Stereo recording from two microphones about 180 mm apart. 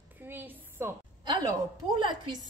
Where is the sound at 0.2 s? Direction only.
10° right (ahead or behind).